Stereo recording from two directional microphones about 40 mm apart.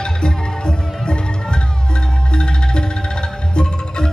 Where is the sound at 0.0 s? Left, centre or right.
Centre.